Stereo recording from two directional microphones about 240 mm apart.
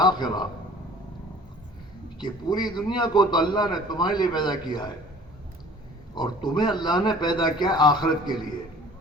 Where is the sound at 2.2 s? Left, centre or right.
Centre.